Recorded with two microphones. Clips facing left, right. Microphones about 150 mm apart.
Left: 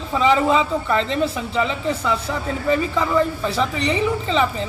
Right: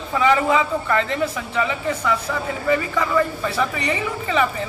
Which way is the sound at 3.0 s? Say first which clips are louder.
Left 1 dB; 5° left (ahead or behind).